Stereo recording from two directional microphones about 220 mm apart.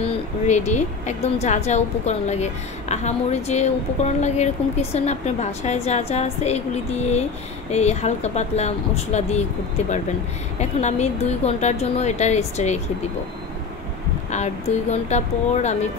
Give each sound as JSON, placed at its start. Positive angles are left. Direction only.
{"t": 0.5, "sound": "a woman's voice", "side_deg": 35}
{"t": 10.6, "sound": "a woman's voice", "side_deg": 30}
{"t": 14.3, "sound": "a woman's voice", "side_deg": 30}